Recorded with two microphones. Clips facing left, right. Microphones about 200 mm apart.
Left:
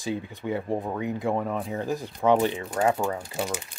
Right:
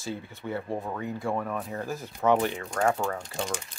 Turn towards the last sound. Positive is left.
turn(degrees=5)  # may be behind; listen again after turning